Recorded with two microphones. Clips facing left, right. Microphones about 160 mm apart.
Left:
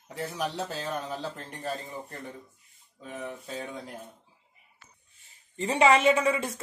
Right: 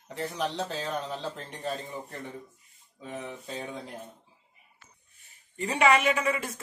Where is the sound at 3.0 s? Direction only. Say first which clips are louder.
Even; centre (ahead or behind).